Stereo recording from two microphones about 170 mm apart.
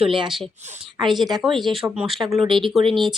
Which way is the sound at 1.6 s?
30° right (ahead or behind).